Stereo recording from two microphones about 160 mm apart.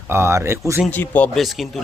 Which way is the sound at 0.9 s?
10° left (ahead or behind).